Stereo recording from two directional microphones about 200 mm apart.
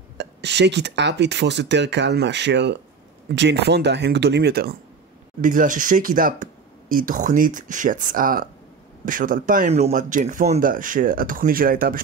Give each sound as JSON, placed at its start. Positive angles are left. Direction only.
{"t": 0.2, "sound": "speech", "side_deg": -60}
{"t": 5.4, "sound": "speech", "side_deg": -40}